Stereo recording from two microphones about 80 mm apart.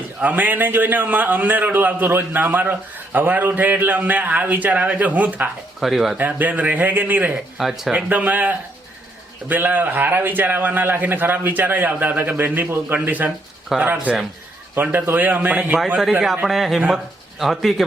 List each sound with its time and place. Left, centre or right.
0.2 s a man's voice: right
5.8 s a man's voice: centre
6.1 s a man's voice: right
7.6 s a man's voice: centre
8.1 s a man's voice: centre
16.2 s a man's voice: centre